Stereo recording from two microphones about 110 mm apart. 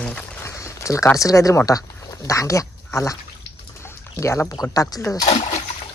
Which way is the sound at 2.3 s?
30° left (ahead or behind).